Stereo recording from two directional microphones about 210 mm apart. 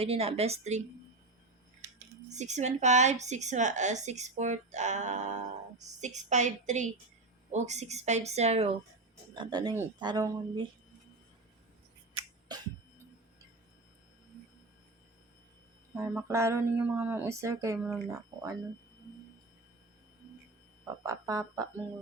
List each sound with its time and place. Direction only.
0.0 s speech: 25° right (ahead or behind)
2.3 s a woman's voice: 35° right (ahead or behind)
12.5 s music: 20° right (ahead or behind)
16.0 s speech: 15° right (ahead or behind)
17.7 s speech: 5° right (ahead or behind)
21.0 s speech: 15° right (ahead or behind)